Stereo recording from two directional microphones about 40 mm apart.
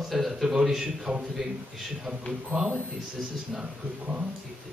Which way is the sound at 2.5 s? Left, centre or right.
Right.